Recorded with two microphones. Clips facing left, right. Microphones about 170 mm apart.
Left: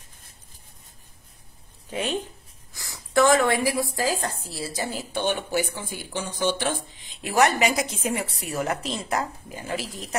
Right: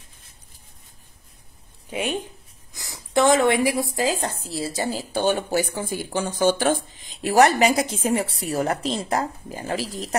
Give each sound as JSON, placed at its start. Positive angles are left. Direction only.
{"t": 1.9, "sound": "a woman's voice", "side_deg": -10}